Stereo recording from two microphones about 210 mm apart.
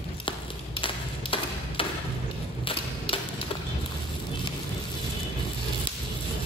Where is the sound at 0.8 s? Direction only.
25° left (ahead or behind).